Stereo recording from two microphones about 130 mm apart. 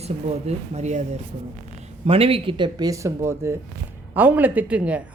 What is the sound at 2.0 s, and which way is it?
Speech, 45° right (ahead or behind).